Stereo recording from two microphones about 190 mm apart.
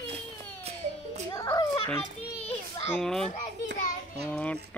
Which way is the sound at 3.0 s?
5° left (ahead or behind).